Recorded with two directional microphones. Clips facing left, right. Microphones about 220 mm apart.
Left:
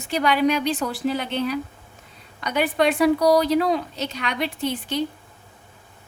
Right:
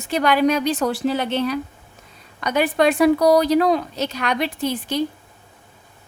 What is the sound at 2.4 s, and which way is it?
A woman's voice, 45° right (ahead or behind).